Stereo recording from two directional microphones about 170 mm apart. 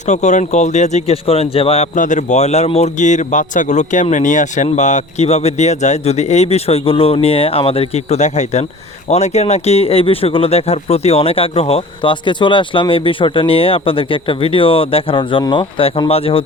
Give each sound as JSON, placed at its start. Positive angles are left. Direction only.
{"t": 0.1, "sound": "speech", "side_deg": 45}